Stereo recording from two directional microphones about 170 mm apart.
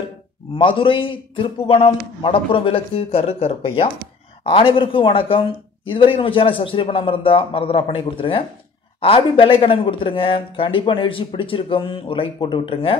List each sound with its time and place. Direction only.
0.6 s speech: 30° left (ahead or behind)